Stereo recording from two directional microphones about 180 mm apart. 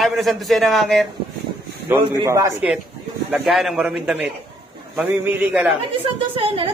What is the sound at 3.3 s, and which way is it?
A man's voice, centre (ahead or behind).